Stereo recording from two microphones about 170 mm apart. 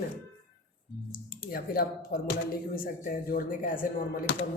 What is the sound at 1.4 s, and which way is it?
Speech, 60° left (ahead or behind).